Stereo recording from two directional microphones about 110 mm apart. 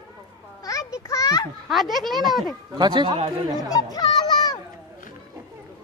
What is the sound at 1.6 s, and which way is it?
Speech, centre (ahead or behind).